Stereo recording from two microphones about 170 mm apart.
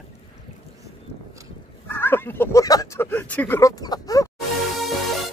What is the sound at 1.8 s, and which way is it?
Speech, 10° left (ahead or behind).